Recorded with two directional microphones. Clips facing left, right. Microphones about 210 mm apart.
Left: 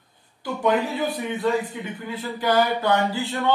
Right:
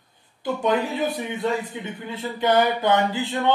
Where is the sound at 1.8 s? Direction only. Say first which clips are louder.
Even; 25° right (ahead or behind).